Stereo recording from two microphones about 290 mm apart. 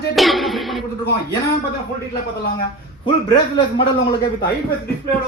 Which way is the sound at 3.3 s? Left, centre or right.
Centre.